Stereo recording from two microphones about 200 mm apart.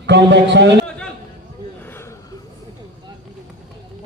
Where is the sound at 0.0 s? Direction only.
60° right (ahead or behind).